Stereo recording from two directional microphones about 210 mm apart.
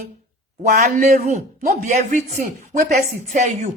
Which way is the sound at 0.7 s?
35° right (ahead or behind).